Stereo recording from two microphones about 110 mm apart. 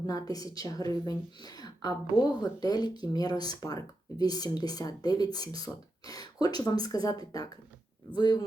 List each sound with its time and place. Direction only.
0.1 s a woman's voice: 35° left (ahead or behind)